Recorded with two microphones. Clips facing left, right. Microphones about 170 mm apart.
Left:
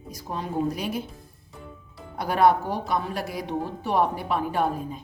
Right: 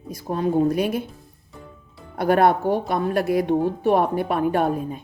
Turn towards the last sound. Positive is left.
turn(degrees=-55)  # may be behind; listen again after turning